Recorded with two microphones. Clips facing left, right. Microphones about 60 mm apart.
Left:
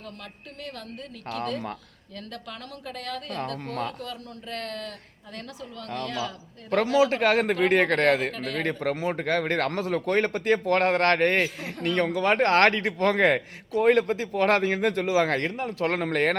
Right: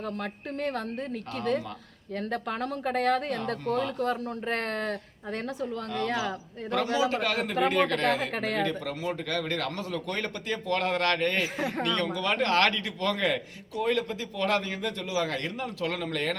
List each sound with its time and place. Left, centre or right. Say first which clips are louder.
0.0 s speech: right 8 dB; right
1.3 s a woman's voice: even; left
2.1 s speech: right 8 dB; right
3.7 s speech: right 7 dB; left
3.9 s speech: right 8 dB; right
5.5 s a woman's voice: left 1 dB; left
6.1 s a man's voice: right 2 dB; right
6.8 s speech: left 7 dB; left
11.4 s speech: right 1 dB; right
12.2 s speech: left 5 dB; left